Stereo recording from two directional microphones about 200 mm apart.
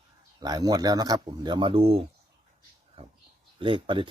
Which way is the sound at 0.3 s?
20° right (ahead or behind).